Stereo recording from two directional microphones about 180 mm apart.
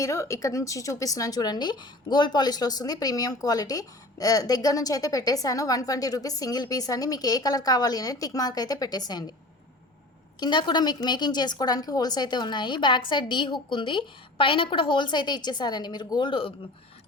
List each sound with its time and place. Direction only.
0.0 s speech: 15° left (ahead or behind)
10.4 s speech: 25° left (ahead or behind)